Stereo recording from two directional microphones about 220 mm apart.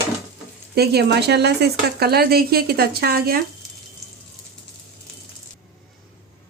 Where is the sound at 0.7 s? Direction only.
45° right (ahead or behind).